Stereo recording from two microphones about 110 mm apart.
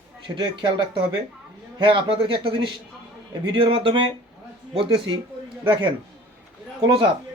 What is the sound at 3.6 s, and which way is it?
Speech, 55° right (ahead or behind).